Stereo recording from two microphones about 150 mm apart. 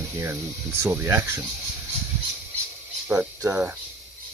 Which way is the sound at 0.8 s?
15° right (ahead or behind).